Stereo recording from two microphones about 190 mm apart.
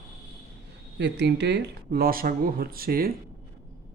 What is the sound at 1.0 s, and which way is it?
Speech, 65° right (ahead or behind).